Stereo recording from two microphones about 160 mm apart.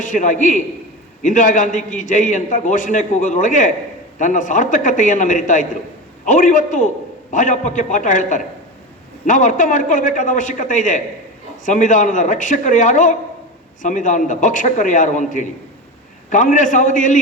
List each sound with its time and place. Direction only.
0.0 s a man's voice: 50° left (ahead or behind)